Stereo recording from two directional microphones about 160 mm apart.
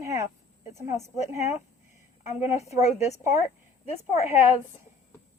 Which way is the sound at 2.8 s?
45° left (ahead or behind).